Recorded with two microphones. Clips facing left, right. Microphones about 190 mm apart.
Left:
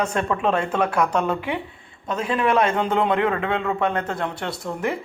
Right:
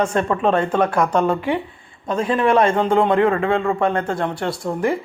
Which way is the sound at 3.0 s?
Centre (ahead or behind).